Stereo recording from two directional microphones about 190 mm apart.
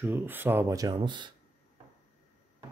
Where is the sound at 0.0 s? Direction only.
10° right (ahead or behind).